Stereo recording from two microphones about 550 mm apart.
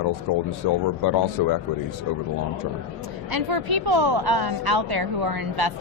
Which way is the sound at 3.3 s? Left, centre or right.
Right.